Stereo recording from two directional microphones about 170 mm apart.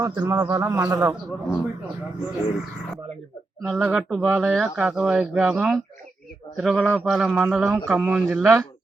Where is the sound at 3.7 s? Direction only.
5° right (ahead or behind).